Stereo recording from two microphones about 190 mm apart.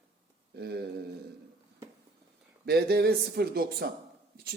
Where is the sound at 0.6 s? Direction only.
60° right (ahead or behind).